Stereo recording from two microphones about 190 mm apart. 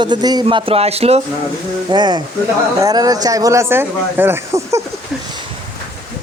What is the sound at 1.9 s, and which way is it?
Speech, 25° right (ahead or behind).